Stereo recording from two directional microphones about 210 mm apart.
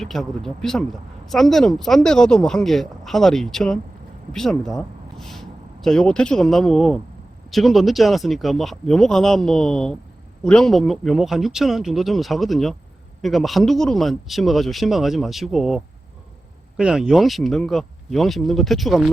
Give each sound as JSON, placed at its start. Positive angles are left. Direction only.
{"t": 0.0, "sound": "speech", "side_deg": 0}